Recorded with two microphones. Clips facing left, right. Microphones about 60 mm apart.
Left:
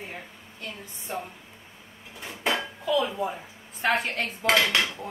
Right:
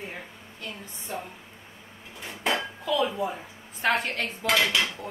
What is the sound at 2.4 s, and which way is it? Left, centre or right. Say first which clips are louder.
Dishes: even; centre.